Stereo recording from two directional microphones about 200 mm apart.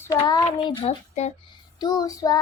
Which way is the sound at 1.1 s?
35° left (ahead or behind).